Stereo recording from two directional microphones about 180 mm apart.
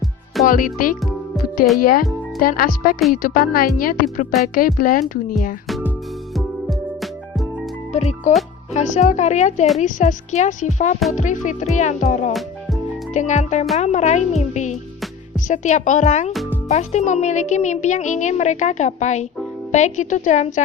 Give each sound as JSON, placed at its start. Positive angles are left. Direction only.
{"t": 0.4, "sound": "speech", "side_deg": 50}
{"t": 6.3, "sound": "music", "side_deg": 0}
{"t": 7.9, "sound": "speech", "side_deg": 40}